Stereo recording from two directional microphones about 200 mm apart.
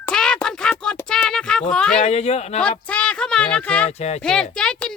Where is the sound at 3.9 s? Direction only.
35° left (ahead or behind).